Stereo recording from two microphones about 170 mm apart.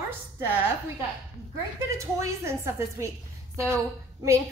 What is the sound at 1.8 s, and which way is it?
A woman's voice, 20° right (ahead or behind).